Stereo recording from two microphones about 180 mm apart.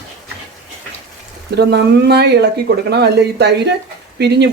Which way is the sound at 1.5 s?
65° right (ahead or behind).